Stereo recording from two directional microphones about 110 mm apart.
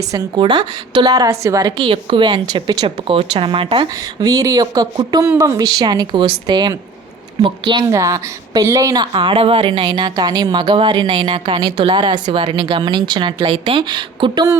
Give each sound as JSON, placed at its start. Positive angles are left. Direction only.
{"t": 0.3, "sound": "speech", "side_deg": -40}
{"t": 3.9, "sound": "a woman's voice", "side_deg": -35}
{"t": 7.9, "sound": "speech", "side_deg": -30}